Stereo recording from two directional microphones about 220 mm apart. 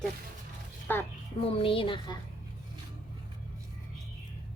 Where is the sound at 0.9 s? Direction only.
10° left (ahead or behind).